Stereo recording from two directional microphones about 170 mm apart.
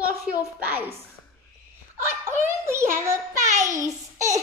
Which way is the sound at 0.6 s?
10° right (ahead or behind).